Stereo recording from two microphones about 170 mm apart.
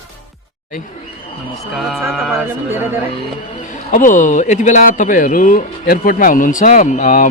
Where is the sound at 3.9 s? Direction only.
50° left (ahead or behind).